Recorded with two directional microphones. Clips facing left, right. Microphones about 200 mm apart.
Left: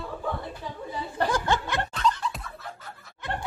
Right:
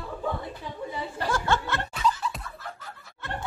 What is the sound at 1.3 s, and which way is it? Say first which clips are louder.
Chuckle: right 3 dB; 15° left (ahead or behind).